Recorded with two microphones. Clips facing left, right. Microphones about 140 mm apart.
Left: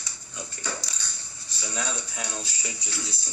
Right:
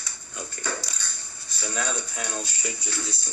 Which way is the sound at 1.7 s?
50° right (ahead or behind).